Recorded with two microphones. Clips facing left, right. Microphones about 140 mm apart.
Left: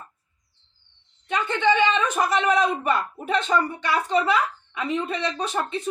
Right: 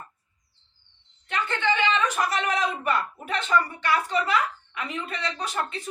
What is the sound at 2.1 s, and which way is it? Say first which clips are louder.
Speech: left 5 dB; 25° left (ahead or behind).